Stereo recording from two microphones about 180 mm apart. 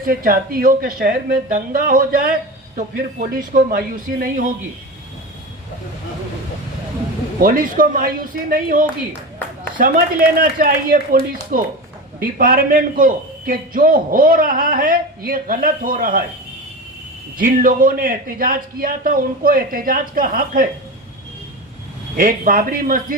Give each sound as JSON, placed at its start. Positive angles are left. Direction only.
{"t": 0.0, "sound": "a man's voice", "side_deg": -50}
{"t": 7.4, "sound": "a man's voice", "side_deg": -50}
{"t": 17.3, "sound": "a man's voice", "side_deg": -50}
{"t": 22.1, "sound": "a man's voice", "side_deg": -50}